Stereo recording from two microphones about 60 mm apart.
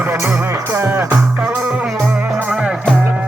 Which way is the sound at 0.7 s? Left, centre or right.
Right.